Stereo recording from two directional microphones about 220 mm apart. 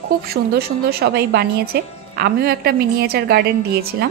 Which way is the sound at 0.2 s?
45° right (ahead or behind).